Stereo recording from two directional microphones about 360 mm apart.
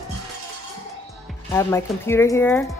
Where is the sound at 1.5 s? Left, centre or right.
Centre.